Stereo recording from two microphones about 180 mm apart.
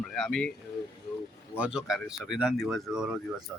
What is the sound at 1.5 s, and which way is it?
Speech, 5° right (ahead or behind).